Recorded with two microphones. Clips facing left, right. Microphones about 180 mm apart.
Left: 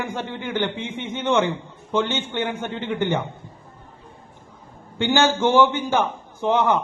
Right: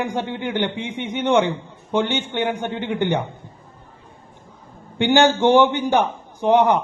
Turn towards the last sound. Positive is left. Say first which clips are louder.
# right 4 dB
turn(degrees=-15)  # may be behind; listen again after turning